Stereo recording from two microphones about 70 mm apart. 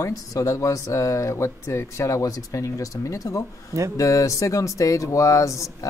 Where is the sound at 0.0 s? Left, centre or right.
Left.